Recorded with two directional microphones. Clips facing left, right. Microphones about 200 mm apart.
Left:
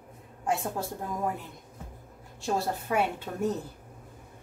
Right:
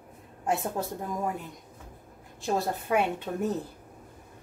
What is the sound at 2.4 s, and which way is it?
Speech, 20° right (ahead or behind).